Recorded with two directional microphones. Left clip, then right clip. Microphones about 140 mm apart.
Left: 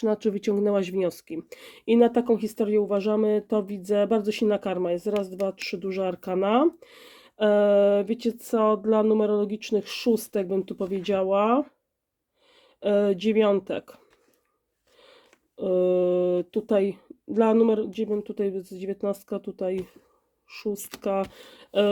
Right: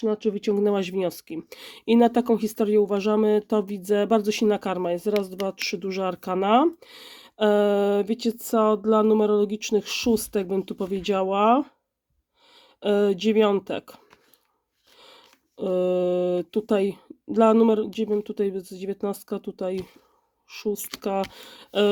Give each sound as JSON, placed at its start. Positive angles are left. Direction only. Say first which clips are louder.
{"t": 0.0, "sound": "speech", "louder": "even", "side_deg": -5}
{"t": 0.5, "sound": "speech", "louder": "right 1 dB", "side_deg": -25}